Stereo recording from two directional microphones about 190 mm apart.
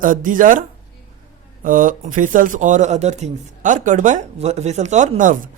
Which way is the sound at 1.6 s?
45° right (ahead or behind).